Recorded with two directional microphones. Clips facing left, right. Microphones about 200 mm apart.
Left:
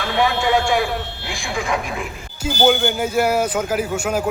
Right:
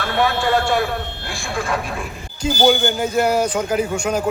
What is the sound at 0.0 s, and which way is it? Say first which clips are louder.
Speech: even; 15° left (ahead or behind).